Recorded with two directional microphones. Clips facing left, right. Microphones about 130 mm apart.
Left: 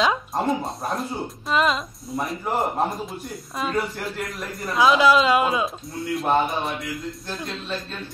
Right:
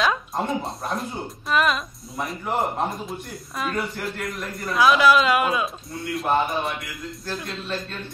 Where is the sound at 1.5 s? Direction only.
25° left (ahead or behind).